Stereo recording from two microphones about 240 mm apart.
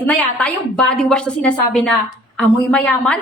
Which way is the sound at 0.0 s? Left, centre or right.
Centre.